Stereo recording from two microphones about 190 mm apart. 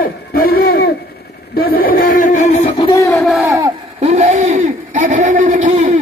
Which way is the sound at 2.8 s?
15° left (ahead or behind).